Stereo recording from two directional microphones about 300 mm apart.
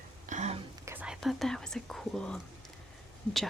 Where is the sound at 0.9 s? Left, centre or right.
Centre.